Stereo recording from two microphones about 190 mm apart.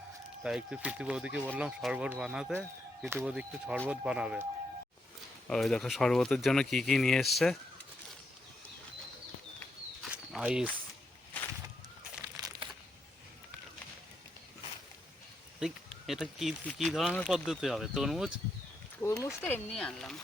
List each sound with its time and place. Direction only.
0.4 s speech: 5° right (ahead or behind)
5.5 s speech: centre (ahead or behind)
10.1 s walk: 5° right (ahead or behind)
12.2 s crumpling: 20° right (ahead or behind)
15.6 s speech: centre (ahead or behind)
19.0 s speech: 15° left (ahead or behind)